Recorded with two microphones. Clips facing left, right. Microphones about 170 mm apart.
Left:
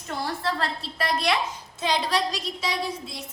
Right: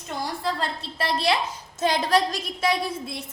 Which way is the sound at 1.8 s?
50° right (ahead or behind).